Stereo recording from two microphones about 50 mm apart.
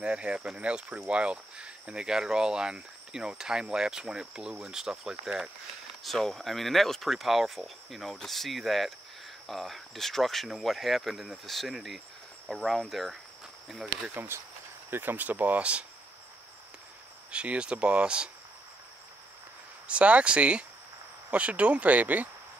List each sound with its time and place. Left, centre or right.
0.0 s speech: centre
6.0 s speech: centre
14.9 s speech: right
17.3 s speech: right
19.9 s speech: right